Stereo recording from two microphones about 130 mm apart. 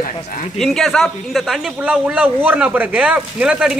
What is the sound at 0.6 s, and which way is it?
Speech, centre (ahead or behind).